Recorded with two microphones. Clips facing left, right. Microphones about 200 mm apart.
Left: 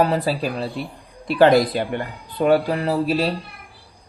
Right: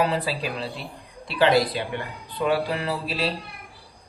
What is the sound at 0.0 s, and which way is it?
Speech, 45° left (ahead or behind).